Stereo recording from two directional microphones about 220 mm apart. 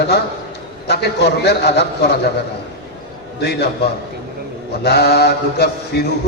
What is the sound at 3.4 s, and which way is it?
A man's voice, 50° left (ahead or behind).